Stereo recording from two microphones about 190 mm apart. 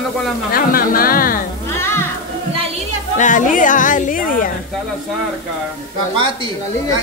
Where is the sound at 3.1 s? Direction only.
40° left (ahead or behind).